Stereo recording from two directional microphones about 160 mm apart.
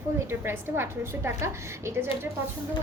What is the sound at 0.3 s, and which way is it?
A woman's voice, 15° right (ahead or behind).